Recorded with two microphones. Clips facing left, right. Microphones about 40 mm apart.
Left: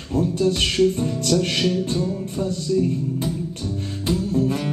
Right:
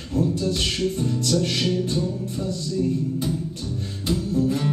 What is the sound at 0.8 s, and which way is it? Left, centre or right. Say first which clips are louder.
Music: left 5 dB; left.